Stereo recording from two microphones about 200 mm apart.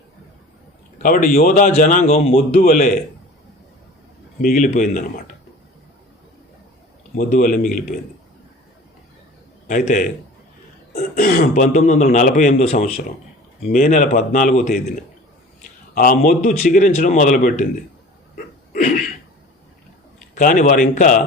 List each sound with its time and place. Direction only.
1.0 s speech: 45° left (ahead or behind)
4.4 s speech: 45° left (ahead or behind)
7.2 s speech: 45° left (ahead or behind)
9.6 s speech: 40° left (ahead or behind)
16.0 s speech: 45° left (ahead or behind)
18.3 s a sound: 40° left (ahead or behind)
20.3 s speech: 45° left (ahead or behind)